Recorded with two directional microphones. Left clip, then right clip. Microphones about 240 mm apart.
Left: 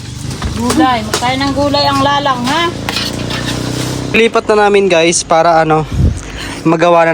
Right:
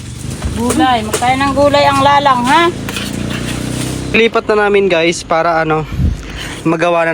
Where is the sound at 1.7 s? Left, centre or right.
Right.